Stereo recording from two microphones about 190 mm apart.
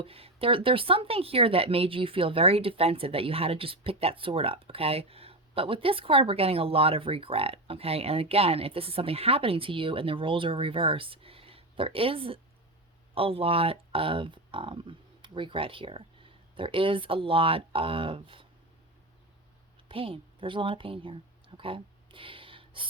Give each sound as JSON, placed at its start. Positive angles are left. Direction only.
{"t": 0.0, "sound": "speech", "side_deg": -30}
{"t": 19.9, "sound": "a woman's voice", "side_deg": -30}